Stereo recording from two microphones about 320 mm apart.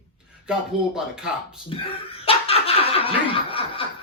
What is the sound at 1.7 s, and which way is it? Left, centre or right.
Laughter, centre.